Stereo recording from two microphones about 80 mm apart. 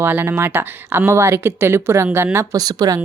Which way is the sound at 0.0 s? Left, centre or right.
Right.